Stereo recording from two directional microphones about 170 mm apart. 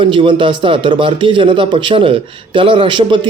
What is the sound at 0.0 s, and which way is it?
A man's voice, 30° right (ahead or behind).